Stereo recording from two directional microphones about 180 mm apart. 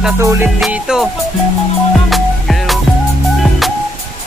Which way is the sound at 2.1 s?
Centre (ahead or behind).